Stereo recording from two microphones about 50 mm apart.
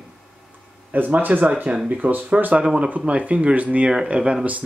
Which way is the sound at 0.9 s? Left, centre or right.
Right.